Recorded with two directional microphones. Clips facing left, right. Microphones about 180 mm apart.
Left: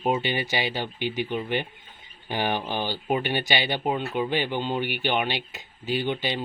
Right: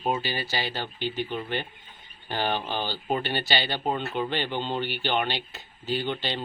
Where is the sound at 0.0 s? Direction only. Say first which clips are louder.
Left 3 dB; 20° left (ahead or behind).